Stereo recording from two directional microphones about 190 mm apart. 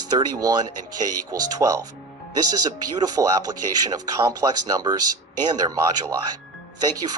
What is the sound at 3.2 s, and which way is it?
Speech, 15° right (ahead or behind).